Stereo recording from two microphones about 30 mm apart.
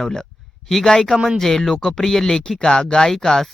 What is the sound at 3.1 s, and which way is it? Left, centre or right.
Speech, centre.